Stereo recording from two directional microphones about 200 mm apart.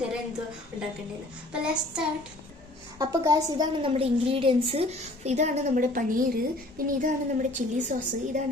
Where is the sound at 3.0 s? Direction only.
15° right (ahead or behind).